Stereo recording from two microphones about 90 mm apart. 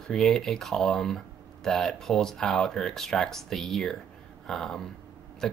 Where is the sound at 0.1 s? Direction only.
5° left (ahead or behind).